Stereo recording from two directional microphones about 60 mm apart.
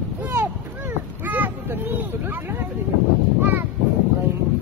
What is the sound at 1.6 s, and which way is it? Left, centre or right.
Speech, right.